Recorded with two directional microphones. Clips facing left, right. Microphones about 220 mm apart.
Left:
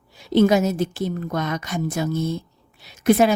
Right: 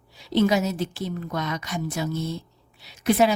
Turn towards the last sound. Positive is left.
turn(degrees=50)  # may be behind; listen again after turning